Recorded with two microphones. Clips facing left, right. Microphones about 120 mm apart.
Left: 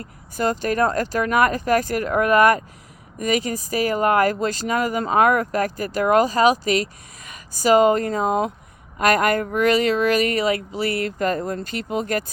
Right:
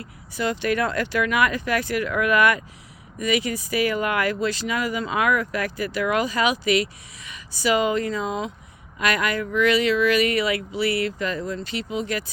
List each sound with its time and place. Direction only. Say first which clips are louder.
0.0 s speech: left 3 dB; 45° left (ahead or behind)